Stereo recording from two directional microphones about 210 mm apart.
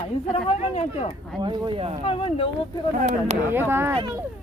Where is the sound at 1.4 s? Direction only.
20° right (ahead or behind).